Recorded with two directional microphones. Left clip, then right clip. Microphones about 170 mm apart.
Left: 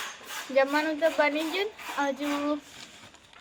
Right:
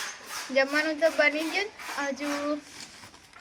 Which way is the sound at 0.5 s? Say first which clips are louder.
Even; 5° left (ahead or behind).